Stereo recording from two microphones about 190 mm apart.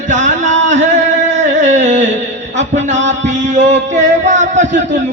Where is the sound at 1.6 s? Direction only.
40° right (ahead or behind).